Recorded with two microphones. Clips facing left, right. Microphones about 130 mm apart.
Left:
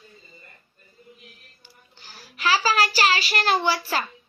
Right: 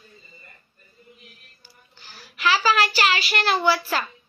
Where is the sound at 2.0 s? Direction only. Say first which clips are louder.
Right 1 dB; 35° left (ahead or behind).